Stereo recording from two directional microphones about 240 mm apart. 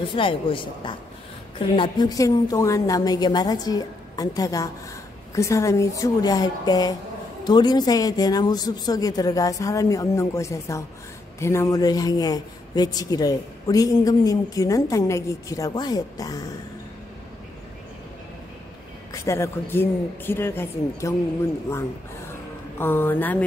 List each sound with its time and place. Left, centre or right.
0.1 s speech: left
19.1 s speech: centre
22.8 s speech: centre